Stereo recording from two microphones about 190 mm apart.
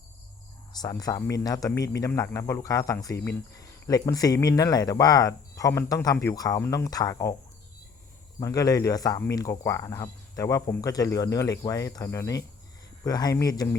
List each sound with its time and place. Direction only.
0.7 s speech: 20° left (ahead or behind)
8.4 s speech: 15° left (ahead or behind)